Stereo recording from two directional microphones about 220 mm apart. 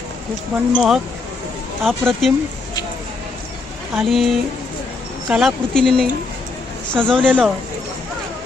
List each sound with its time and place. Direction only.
0.7 s speech: centre (ahead or behind)
3.9 s speech: centre (ahead or behind)